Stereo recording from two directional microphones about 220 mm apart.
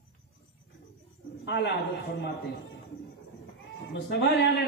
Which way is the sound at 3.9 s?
50° left (ahead or behind).